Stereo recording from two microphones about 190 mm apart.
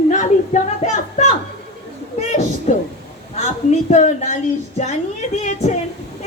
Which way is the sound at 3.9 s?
35° left (ahead or behind).